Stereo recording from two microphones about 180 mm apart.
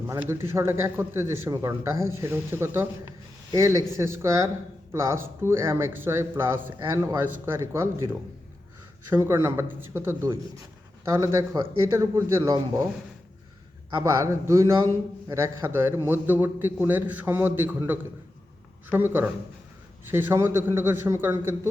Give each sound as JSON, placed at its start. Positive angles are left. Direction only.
{"t": 0.1, "sound": "speech", "side_deg": -15}
{"t": 14.0, "sound": "speech", "side_deg": -15}